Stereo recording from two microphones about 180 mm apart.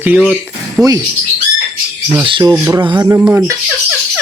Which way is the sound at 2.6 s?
10° right (ahead or behind).